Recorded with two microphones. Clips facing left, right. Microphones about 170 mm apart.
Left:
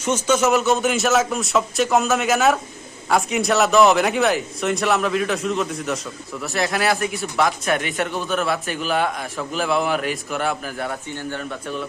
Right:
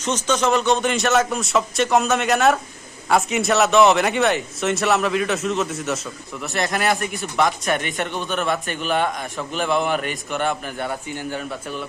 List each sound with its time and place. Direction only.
0.0 s speech: 10° left (ahead or behind)